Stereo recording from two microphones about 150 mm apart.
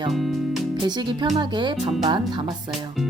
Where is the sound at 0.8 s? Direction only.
30° right (ahead or behind).